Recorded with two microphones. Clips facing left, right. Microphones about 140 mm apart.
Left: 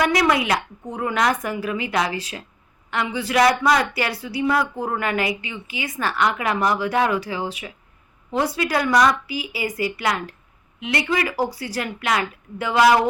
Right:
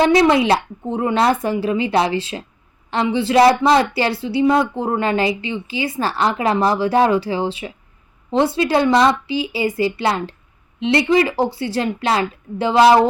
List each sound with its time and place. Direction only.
0.0 s a woman's voice: 25° right (ahead or behind)